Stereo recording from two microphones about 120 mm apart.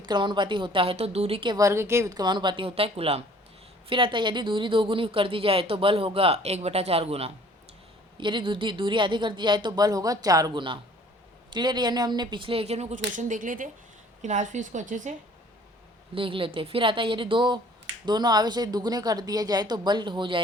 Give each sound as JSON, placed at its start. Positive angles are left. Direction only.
{"t": 0.0, "sound": "speech", "side_deg": -40}
{"t": 1.5, "sound": "speech", "side_deg": -25}
{"t": 8.2, "sound": "a woman's voice", "side_deg": -45}
{"t": 16.1, "sound": "speech", "side_deg": -45}